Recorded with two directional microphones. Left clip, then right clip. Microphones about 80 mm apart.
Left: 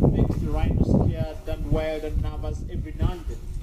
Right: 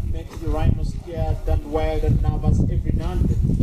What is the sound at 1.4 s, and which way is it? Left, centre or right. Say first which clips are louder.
Speech: right 3 dB; left.